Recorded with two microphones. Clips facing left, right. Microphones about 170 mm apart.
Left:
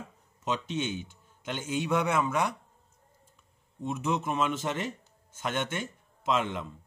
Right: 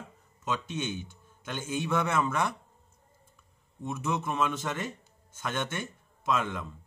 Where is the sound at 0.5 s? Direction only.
20° left (ahead or behind).